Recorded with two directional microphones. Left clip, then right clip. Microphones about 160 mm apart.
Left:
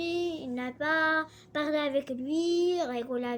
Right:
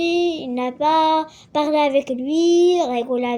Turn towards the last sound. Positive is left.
turn(degrees=0)  # may be behind; listen again after turning